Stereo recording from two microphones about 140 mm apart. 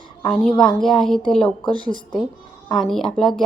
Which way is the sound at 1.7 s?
30° right (ahead or behind).